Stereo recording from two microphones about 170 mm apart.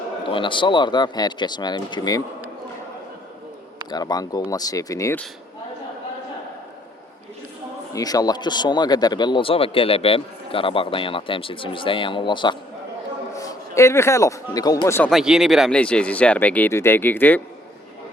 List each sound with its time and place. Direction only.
0.3 s speech: 30° left (ahead or behind)
3.8 s speech: 25° left (ahead or behind)
7.9 s a man's voice: 20° left (ahead or behind)
15.1 s speech: 5° right (ahead or behind)